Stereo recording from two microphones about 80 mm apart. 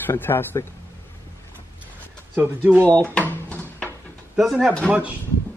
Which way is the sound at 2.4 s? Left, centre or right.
Centre.